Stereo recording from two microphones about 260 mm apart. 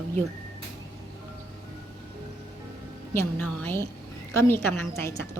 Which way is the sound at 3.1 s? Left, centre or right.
Centre.